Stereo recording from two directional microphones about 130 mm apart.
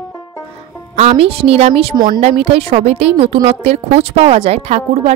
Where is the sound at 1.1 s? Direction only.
45° right (ahead or behind).